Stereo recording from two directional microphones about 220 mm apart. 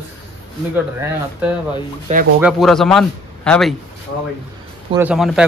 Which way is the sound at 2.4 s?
Centre (ahead or behind).